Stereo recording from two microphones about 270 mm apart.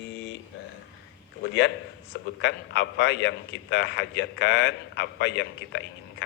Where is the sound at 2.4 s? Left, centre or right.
Left.